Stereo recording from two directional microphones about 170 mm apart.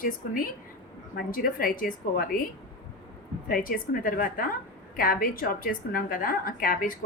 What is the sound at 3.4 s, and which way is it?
A woman's voice, 55° left (ahead or behind).